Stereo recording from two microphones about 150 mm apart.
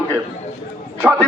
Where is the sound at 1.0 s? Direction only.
10° right (ahead or behind).